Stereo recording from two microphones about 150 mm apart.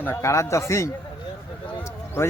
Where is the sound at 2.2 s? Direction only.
20° left (ahead or behind).